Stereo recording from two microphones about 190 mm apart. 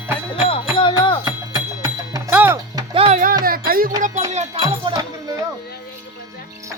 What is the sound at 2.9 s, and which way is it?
Music, 30° right (ahead or behind).